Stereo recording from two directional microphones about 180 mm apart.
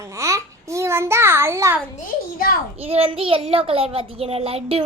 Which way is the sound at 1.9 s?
55° left (ahead or behind).